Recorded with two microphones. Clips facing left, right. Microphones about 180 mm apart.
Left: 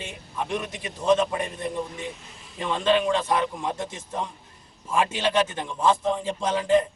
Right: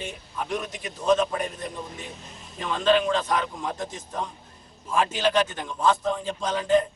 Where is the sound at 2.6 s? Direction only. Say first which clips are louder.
Even; 25° left (ahead or behind).